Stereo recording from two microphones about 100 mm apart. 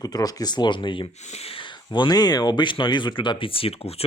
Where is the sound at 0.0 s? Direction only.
40° left (ahead or behind).